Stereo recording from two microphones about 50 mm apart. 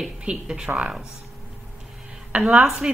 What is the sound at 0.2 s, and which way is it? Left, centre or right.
Speech, centre.